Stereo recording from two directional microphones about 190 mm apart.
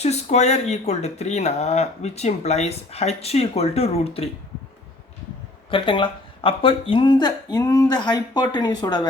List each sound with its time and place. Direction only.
0.0 s speech: 35° left (ahead or behind)
5.7 s speech: 25° left (ahead or behind)